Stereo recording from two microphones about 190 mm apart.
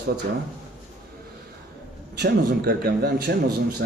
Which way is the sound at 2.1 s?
55° right (ahead or behind).